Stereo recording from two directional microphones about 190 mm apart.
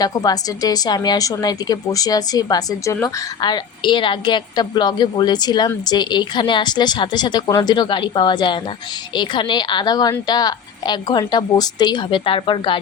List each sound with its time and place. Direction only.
0.0 s a woman's voice: 20° left (ahead or behind)